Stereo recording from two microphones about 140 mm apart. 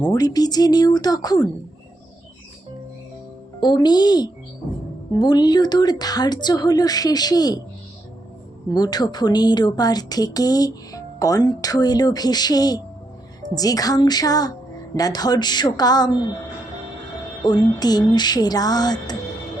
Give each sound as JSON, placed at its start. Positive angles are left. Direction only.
{"t": 0.1, "sound": "a woman's voice", "side_deg": 25}
{"t": 3.6, "sound": "a woman's voice", "side_deg": 30}
{"t": 8.7, "sound": "a woman's voice", "side_deg": 30}
{"t": 17.4, "sound": "a woman's voice", "side_deg": 30}